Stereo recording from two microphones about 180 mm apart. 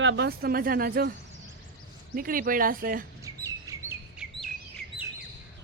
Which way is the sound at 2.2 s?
50° right (ahead or behind).